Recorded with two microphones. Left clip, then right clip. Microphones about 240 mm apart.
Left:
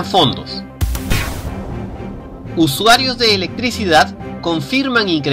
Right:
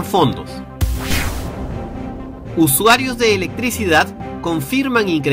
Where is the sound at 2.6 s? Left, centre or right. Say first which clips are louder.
Left 1 dB; right.